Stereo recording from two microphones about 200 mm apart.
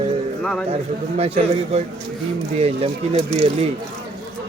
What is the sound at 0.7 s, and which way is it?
A man's voice, 30° right (ahead or behind).